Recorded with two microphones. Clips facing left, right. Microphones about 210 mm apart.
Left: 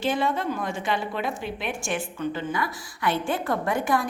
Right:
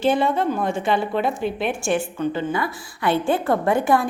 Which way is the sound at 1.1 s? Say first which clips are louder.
Right 7 dB; 35° right (ahead or behind).